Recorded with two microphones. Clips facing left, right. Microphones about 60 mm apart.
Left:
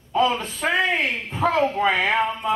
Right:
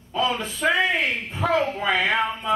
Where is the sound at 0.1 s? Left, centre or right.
Left.